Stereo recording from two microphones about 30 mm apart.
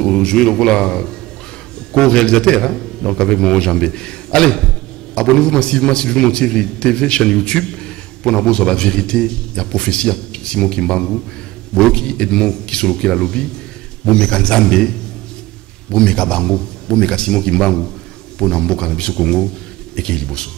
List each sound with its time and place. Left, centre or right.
0.0 s a man's voice: left
15.9 s a man's voice: left